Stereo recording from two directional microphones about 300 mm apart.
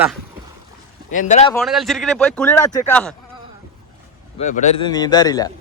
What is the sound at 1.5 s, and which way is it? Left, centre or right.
Speech, centre.